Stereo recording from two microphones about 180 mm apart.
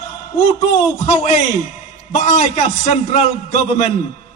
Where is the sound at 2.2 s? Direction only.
40° left (ahead or behind).